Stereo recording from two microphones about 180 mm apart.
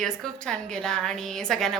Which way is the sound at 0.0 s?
5° left (ahead or behind).